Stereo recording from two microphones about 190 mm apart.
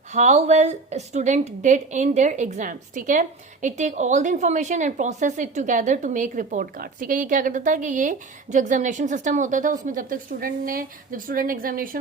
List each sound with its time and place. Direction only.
0.1 s a woman's voice: 40° right (ahead or behind)